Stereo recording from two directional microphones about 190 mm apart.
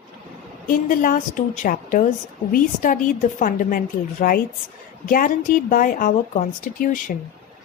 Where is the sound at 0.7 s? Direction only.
45° left (ahead or behind).